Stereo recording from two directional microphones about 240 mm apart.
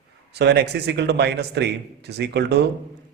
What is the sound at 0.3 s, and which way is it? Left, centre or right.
A man's voice, right.